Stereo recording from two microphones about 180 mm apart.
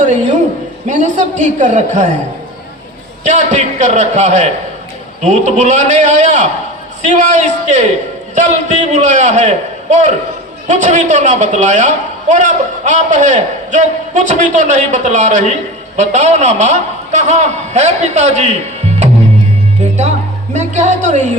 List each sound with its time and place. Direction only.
0.0 s a sound: 40° right (ahead or behind)
0.9 s a man's voice: 40° right (ahead or behind)
3.2 s a man's voice: 40° right (ahead or behind)
19.8 s music: 40° right (ahead or behind)